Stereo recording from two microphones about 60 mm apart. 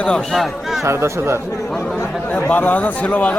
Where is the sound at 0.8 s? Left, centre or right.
Right.